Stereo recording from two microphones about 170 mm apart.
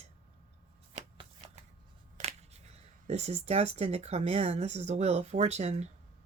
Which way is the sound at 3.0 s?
40° right (ahead or behind).